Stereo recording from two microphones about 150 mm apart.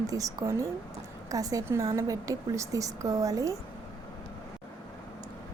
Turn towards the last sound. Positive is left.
turn(degrees=-20)  # may be behind; listen again after turning